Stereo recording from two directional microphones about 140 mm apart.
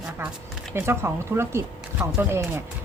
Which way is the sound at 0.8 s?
15° right (ahead or behind).